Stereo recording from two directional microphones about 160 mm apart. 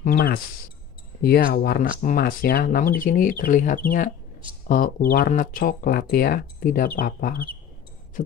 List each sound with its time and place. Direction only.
0.0 s speech: 65° left (ahead or behind)